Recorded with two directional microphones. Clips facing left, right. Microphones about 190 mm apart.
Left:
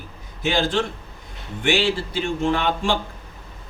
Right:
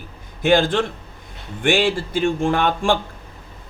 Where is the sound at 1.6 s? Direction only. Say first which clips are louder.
Right 3 dB; 50° right (ahead or behind).